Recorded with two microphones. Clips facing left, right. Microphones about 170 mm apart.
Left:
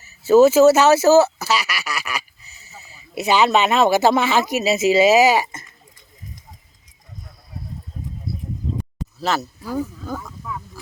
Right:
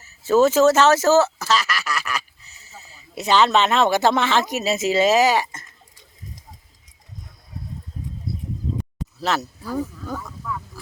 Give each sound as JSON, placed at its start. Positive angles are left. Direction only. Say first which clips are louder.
{"t": 0.2, "sound": "speech", "louder": "left 4 dB", "side_deg": 10}
{"t": 9.2, "sound": "speech", "louder": "left 1 dB", "side_deg": 0}